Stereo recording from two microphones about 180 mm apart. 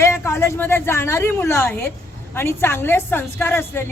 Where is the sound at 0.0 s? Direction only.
15° left (ahead or behind).